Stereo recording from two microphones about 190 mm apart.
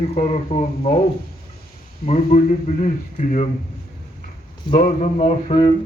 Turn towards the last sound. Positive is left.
turn(degrees=30)  # may be behind; listen again after turning